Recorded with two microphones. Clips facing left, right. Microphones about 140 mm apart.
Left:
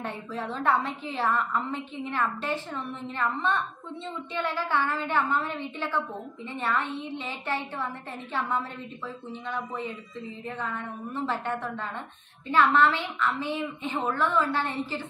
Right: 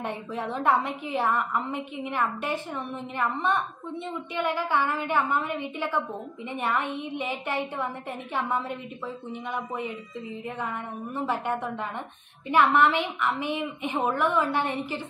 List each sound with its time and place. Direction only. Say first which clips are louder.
0.0 s a woman's voice: right 2 dB; 15° right (ahead or behind)
11.2 s a woman's voice: right 2 dB; 15° right (ahead or behind)